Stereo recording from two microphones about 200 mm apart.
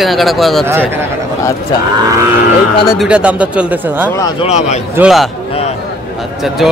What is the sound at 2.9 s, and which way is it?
Speech, 5° right (ahead or behind).